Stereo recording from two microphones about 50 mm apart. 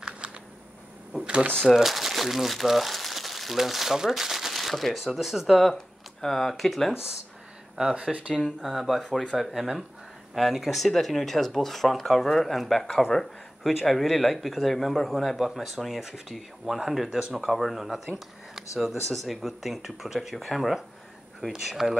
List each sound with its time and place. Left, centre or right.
1.2 s typewriter: right
1.7 s speech: centre
7.7 s speech: centre
8.4 s speech: centre
8.6 s speech: centre